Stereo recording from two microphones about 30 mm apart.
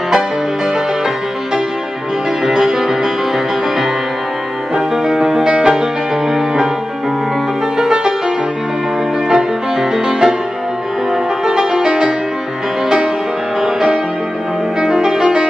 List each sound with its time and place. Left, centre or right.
2.4 s music: right
4.7 s music: centre
7.8 s music: centre
9.3 s music: centre
11.8 s music: right
14.8 s music: centre